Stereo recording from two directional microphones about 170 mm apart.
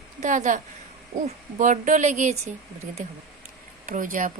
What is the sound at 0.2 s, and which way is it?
Speech, 45° right (ahead or behind).